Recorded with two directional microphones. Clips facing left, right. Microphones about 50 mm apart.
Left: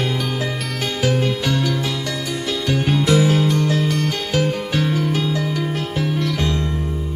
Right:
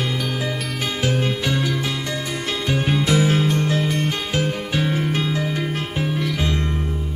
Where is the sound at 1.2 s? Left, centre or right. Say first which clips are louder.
Left 2 dB; centre.